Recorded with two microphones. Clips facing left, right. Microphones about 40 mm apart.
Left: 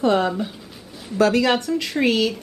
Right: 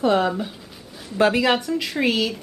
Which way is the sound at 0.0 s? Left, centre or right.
Centre.